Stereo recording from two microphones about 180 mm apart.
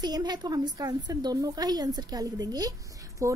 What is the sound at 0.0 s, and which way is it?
A woman's voice, 25° right (ahead or behind).